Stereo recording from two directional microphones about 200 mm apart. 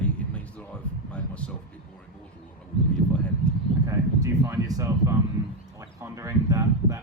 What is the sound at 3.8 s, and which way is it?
Speech, 15° right (ahead or behind).